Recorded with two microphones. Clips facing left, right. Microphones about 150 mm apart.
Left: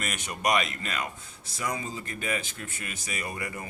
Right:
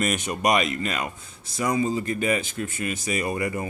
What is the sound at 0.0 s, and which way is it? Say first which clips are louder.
Speech: right 7 dB; 20° right (ahead or behind).